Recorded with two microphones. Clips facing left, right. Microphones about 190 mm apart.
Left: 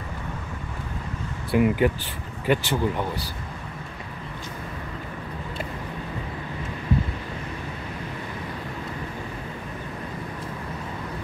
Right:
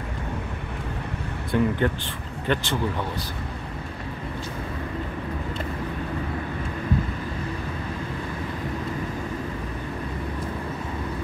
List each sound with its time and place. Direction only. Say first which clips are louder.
1.5 s speech: left 2 dB; 10° left (ahead or behind)